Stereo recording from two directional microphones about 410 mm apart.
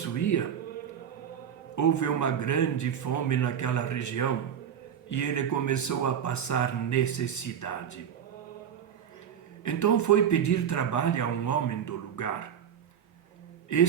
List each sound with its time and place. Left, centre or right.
0.2 s speech: left
1.7 s speech: left
9.6 s speech: left
13.7 s speech: left